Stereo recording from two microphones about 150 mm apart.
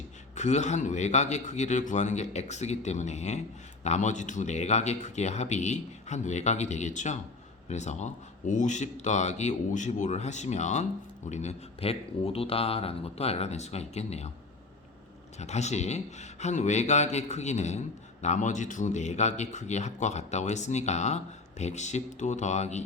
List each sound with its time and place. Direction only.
0.3 s speech: 50° left (ahead or behind)
15.4 s speech: 50° left (ahead or behind)